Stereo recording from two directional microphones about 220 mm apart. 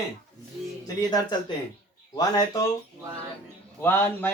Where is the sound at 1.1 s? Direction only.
20° left (ahead or behind).